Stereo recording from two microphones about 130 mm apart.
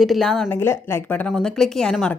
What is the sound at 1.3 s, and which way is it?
Speech, 5° left (ahead or behind).